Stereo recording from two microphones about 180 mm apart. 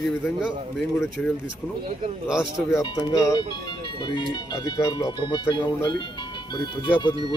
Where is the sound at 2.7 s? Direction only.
20° left (ahead or behind).